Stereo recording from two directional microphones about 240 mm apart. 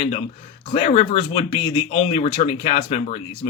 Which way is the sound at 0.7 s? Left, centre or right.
Left.